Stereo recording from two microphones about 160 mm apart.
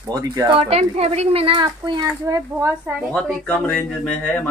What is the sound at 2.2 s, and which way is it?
Speech, 20° right (ahead or behind).